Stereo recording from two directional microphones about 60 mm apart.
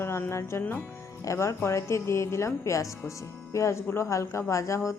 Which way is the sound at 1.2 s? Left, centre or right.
Left.